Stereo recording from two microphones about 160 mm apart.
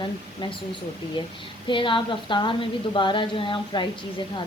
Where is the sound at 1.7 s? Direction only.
30° left (ahead or behind).